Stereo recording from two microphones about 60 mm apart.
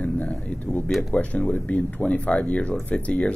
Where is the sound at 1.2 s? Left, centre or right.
Left.